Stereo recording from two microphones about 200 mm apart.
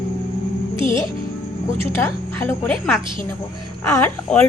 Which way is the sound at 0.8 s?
25° right (ahead or behind).